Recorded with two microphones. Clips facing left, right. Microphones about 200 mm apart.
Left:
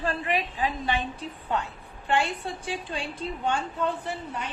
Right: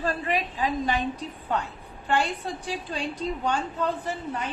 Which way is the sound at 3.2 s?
40° right (ahead or behind).